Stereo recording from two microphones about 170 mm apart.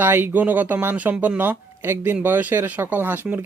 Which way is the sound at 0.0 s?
10° right (ahead or behind).